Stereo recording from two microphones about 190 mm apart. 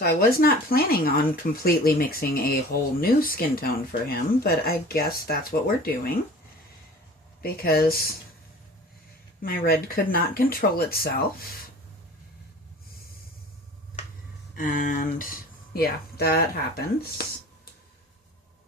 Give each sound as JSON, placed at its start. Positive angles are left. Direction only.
{"t": 0.0, "sound": "speech", "side_deg": 50}
{"t": 7.4, "sound": "speech", "side_deg": 55}
{"t": 9.4, "sound": "speech", "side_deg": 50}
{"t": 14.5, "sound": "speech", "side_deg": 45}